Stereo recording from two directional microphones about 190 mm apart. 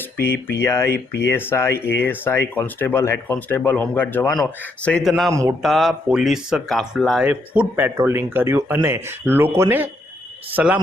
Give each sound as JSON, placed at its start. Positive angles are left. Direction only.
{"t": 0.0, "sound": "a man's voice", "side_deg": 10}
{"t": 5.3, "sound": "speech", "side_deg": -15}
{"t": 5.6, "sound": "speech", "side_deg": 0}